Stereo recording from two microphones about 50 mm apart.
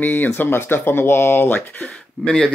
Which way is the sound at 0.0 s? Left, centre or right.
Left.